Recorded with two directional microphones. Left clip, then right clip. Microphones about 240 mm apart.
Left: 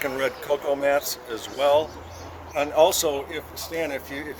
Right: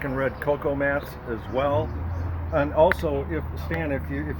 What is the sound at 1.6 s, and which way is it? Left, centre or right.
Speech, left.